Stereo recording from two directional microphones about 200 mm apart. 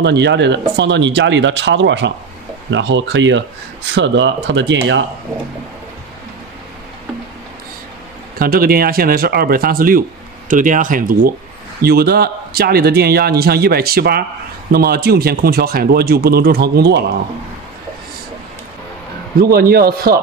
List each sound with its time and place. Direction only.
0.0 s speech: 60° right (ahead or behind)
8.4 s a man's voice: 45° right (ahead or behind)
19.5 s a man's voice: 50° right (ahead or behind)